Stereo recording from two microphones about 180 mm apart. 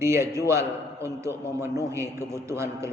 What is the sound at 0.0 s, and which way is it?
A man's voice, 15° right (ahead or behind).